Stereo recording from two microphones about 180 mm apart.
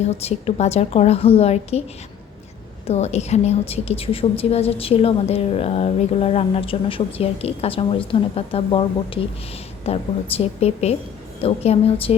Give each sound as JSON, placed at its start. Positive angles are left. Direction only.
{"t": 0.0, "sound": "a woman's voice", "side_deg": 35}
{"t": 2.8, "sound": "a woman's voice", "side_deg": 35}